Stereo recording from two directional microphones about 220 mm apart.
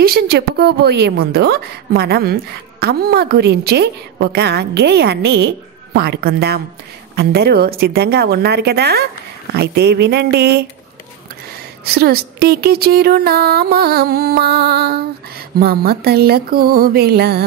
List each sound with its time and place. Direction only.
0.0 s speech: 45° right (ahead or behind)